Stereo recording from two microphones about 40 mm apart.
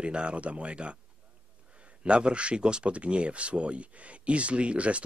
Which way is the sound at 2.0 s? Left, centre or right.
Right.